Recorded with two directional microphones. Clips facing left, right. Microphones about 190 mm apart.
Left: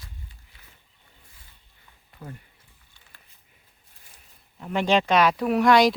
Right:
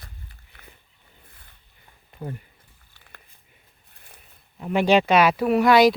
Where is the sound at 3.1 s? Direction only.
60° right (ahead or behind).